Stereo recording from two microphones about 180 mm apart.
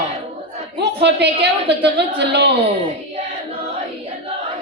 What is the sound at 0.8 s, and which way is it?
A woman's voice, 70° right (ahead or behind).